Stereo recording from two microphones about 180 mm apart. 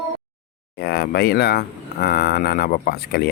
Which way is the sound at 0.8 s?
60° left (ahead or behind).